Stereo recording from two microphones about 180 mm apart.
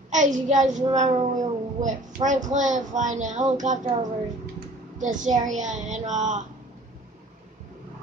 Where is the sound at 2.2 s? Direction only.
25° right (ahead or behind).